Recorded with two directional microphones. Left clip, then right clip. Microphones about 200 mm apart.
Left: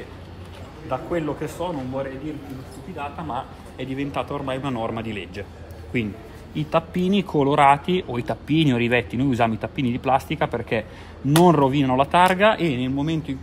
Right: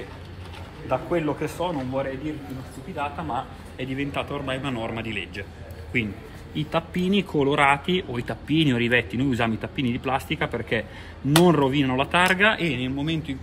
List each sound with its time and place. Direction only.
0.8 s a man's voice: 10° left (ahead or behind)
3.7 s speech: 35° left (ahead or behind)
6.5 s speech: 35° left (ahead or behind)